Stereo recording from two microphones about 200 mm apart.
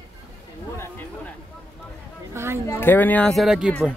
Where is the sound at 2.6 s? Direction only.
10° left (ahead or behind); by 3.9 s 5° right (ahead or behind).